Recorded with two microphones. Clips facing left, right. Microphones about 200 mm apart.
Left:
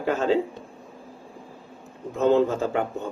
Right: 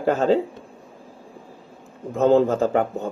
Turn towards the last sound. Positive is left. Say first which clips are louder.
# right 5 dB
turn(degrees=-40)  # may be behind; listen again after turning